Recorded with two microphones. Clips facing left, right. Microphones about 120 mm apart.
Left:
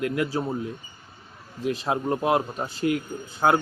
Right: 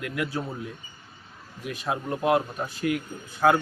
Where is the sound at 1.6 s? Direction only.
25° left (ahead or behind).